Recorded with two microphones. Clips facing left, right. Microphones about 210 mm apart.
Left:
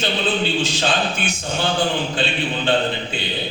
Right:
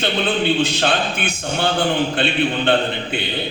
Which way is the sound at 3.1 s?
60° right (ahead or behind).